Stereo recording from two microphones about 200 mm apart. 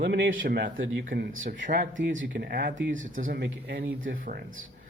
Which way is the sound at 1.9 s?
70° right (ahead or behind).